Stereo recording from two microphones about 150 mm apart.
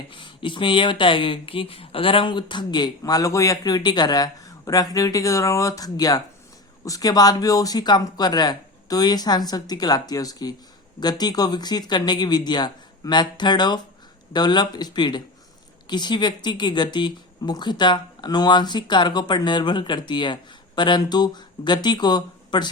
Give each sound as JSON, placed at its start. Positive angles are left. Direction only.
{"t": 0.1, "sound": "speech", "side_deg": 35}